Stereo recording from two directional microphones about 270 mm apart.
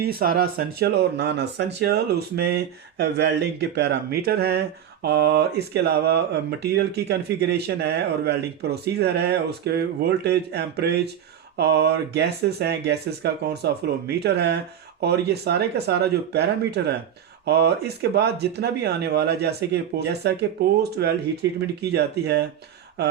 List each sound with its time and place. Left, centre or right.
0.2 s speech: right
21.8 s speech: right